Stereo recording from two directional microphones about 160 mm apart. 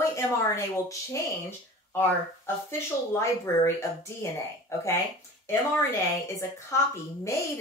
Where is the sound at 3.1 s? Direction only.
15° left (ahead or behind).